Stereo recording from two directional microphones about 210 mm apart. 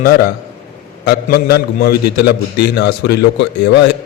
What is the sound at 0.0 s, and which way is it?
A man's voice, 45° left (ahead or behind).